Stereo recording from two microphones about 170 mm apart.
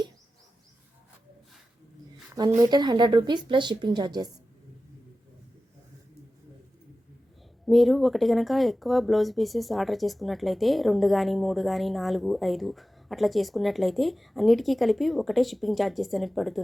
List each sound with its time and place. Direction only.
2.6 s speech: 25° right (ahead or behind)
7.6 s speech: centre (ahead or behind)